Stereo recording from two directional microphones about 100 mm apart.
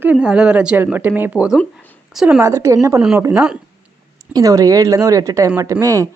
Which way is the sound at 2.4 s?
30° right (ahead or behind).